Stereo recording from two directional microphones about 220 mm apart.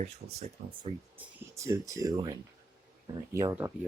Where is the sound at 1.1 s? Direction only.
10° right (ahead or behind).